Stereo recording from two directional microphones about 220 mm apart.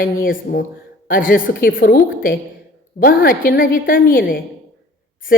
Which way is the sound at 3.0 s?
40° left (ahead or behind).